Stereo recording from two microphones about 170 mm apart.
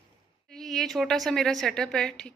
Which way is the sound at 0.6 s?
Centre (ahead or behind).